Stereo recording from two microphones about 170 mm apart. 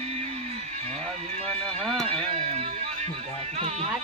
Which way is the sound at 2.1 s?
35° right (ahead or behind).